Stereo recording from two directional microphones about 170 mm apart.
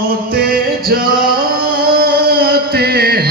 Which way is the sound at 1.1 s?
60° right (ahead or behind).